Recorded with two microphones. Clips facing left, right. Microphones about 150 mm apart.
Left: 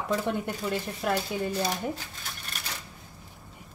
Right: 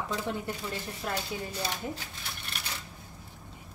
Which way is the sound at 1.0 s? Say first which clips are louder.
Left 7 dB; 65° left (ahead or behind).